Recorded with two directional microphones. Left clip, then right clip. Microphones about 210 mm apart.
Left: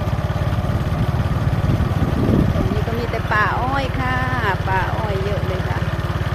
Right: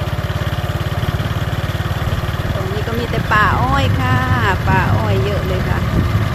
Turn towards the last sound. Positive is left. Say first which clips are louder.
# right 4 dB
turn(degrees=-25)  # may be behind; listen again after turning